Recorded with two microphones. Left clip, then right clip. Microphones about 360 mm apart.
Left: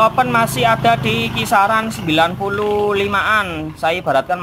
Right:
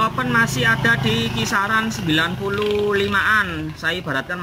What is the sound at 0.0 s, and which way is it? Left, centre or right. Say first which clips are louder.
Speech: left 5 dB; centre.